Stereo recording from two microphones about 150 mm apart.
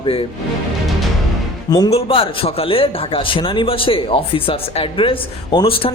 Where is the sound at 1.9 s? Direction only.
40° left (ahead or behind).